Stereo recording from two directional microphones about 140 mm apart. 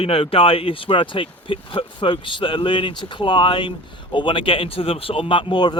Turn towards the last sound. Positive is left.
turn(degrees=35)  # may be behind; listen again after turning